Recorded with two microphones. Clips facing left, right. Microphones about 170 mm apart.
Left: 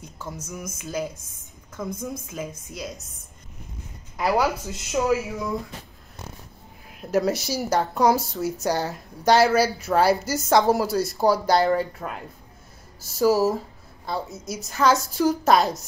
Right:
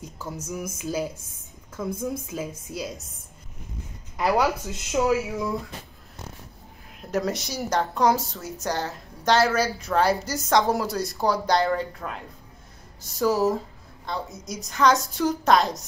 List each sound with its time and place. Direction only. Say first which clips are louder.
0.2 s a woman's voice: right 2 dB; 10° right (ahead or behind)
2.7 s a woman's voice: right 5 dB; 30° right (ahead or behind)
4.2 s a woman's voice: even; 10° left (ahead or behind)
4.9 s a woman's voice: even; 5° right (ahead or behind)
7.0 s a woman's voice: left 4 dB; 5° left (ahead or behind)